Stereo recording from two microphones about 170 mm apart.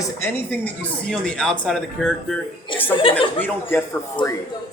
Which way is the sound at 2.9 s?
30° left (ahead or behind).